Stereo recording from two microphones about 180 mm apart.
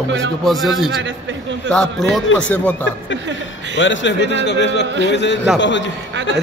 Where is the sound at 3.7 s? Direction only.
90° left.